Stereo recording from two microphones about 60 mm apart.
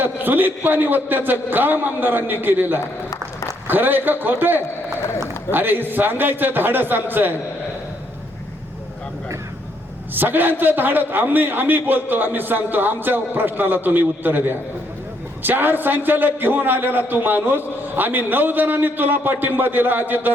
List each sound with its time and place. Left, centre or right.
0.0 s a man's voice: right
10.2 s a man's voice: right